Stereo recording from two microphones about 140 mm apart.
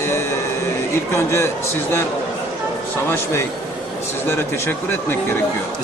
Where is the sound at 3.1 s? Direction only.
20° left (ahead or behind).